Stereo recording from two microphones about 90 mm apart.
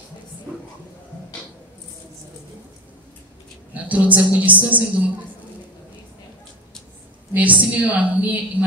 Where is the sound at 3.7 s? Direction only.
15° right (ahead or behind).